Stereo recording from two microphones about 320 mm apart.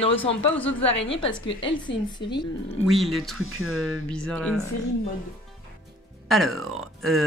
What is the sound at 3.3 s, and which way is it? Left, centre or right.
Speech, right.